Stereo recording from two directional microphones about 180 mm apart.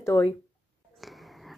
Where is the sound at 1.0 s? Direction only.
Centre (ahead or behind).